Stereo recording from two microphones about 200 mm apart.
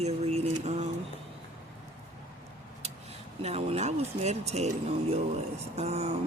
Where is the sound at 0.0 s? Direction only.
30° right (ahead or behind).